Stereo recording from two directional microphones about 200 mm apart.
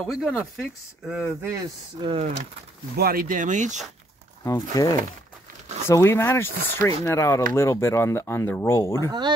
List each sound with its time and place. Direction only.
0.0 s speech: centre (ahead or behind)
2.0 s speech: 25° right (ahead or behind)
3.0 s speech: 45° right (ahead or behind)
4.5 s speech: 15° left (ahead or behind)